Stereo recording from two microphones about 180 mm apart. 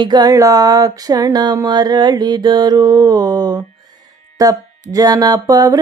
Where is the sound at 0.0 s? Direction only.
25° right (ahead or behind).